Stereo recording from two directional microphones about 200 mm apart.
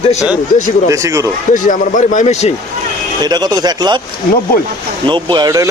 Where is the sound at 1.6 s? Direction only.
40° left (ahead or behind).